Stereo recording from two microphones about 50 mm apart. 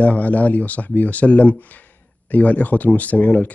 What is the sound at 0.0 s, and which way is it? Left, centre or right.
Speech, left.